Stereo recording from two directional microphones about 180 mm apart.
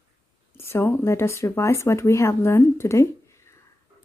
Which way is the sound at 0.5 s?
15° left (ahead or behind).